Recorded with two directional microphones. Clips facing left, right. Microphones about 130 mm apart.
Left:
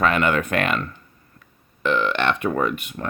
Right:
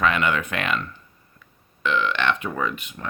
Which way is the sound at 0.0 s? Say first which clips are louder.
Left 2 dB; 45° left (ahead or behind).